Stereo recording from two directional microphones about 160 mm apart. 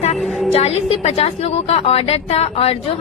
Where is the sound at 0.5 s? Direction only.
40° left (ahead or behind).